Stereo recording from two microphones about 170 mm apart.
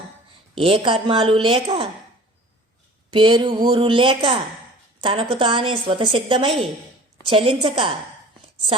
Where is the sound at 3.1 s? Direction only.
30° right (ahead or behind).